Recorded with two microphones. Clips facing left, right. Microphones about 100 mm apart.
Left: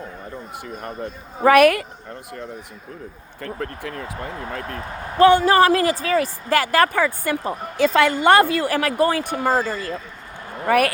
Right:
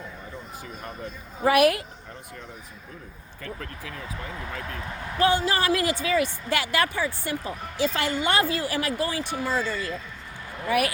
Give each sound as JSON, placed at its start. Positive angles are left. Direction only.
{"t": 0.8, "sound": "speech", "side_deg": 50}
{"t": 3.4, "sound": "speech", "side_deg": 50}